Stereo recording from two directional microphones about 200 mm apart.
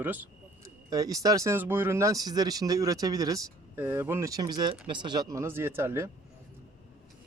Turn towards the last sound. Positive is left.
turn(degrees=-10)  # may be behind; listen again after turning